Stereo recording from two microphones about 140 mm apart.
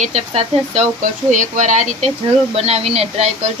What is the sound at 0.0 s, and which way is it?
Speech, 50° right (ahead or behind).